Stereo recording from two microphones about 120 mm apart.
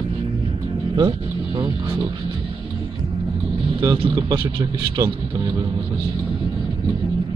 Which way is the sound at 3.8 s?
40° right (ahead or behind).